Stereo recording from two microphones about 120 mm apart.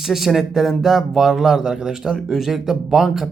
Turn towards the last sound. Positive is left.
turn(degrees=-5)  # may be behind; listen again after turning